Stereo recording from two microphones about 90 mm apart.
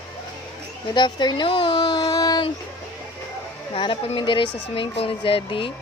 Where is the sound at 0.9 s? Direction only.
55° left (ahead or behind).